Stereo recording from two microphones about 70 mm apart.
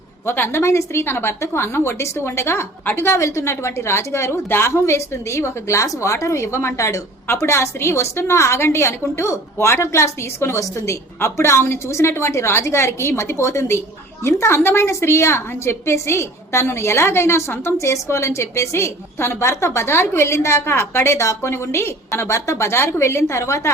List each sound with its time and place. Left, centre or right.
0.3 s a woman's voice: left